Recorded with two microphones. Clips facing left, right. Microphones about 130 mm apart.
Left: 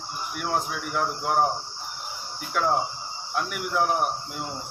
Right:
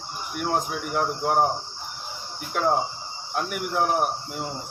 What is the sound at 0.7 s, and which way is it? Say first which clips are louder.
Speech: right 2 dB; 40° right (ahead or behind).